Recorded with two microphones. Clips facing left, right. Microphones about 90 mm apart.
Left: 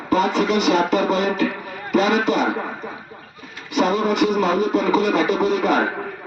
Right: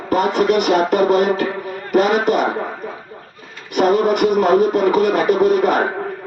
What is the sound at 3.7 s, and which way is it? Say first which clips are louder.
Music: right 4 dB; 55° right (ahead or behind).